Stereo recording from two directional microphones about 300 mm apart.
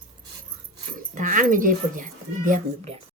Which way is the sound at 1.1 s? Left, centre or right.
Right.